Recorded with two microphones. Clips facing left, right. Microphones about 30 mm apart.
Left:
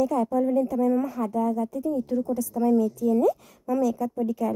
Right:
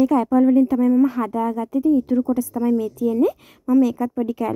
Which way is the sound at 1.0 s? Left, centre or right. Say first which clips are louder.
Right 6 dB; right.